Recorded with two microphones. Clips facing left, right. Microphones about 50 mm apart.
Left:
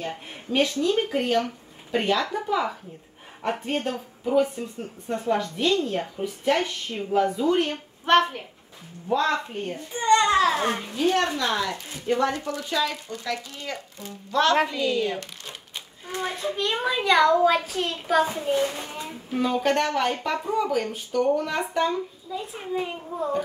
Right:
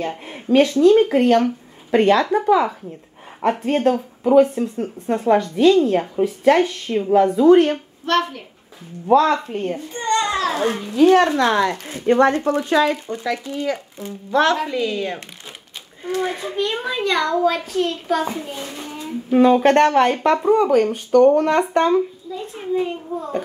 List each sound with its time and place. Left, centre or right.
0.0 s speech: right
4.2 s speech: right
5.6 s a woman's voice: right
8.0 s speech: centre
9.1 s a woman's voice: right
9.9 s a child's voice: centre
11.0 s speech: right
13.1 s speech: centre
16.2 s a child's voice: centre
19.3 s speech: right
22.3 s a child's voice: centre